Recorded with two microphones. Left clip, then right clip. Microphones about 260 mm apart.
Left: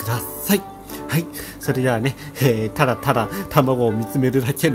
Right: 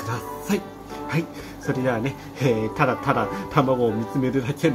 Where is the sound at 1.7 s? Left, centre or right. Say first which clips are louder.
Left 4 dB; left.